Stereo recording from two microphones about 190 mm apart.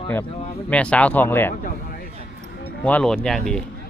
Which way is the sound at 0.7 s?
5° left (ahead or behind).